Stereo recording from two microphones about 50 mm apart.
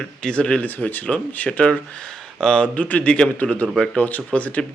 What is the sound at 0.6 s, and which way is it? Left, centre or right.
Speech, left.